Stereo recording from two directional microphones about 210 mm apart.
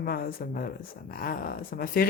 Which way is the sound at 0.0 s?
45° left (ahead or behind).